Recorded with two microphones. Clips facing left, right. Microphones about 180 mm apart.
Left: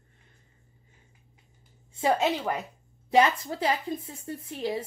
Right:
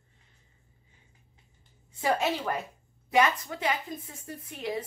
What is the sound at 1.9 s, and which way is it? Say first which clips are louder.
A woman's voice: left 3 dB; 25° left (ahead or behind).